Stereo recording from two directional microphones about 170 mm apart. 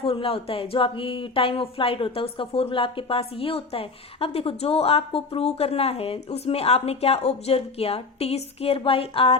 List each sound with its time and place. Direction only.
0.0 s speech: 35° left (ahead or behind)